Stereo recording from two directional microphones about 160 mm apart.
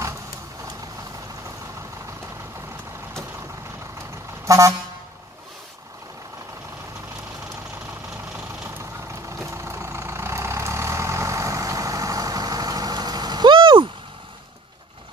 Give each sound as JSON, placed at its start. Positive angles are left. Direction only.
{"t": 4.5, "sound": "vehicle", "side_deg": -20}
{"t": 8.6, "sound": "vehicle", "side_deg": -15}